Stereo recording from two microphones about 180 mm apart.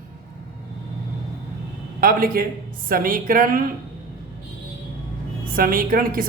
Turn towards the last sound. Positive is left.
turn(degrees=-50)  # may be behind; listen again after turning